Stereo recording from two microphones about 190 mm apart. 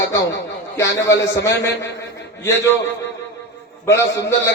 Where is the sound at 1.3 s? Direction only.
15° left (ahead or behind).